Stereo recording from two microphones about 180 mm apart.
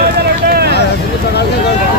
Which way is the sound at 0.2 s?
60° right (ahead or behind).